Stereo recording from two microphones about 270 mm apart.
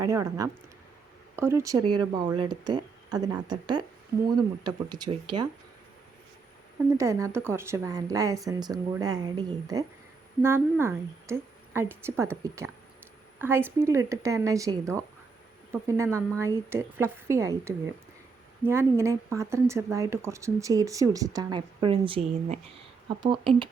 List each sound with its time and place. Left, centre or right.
0.0 s speech: centre
6.9 s speech: centre